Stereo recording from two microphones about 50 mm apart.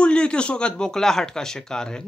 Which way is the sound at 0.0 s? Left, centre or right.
Centre.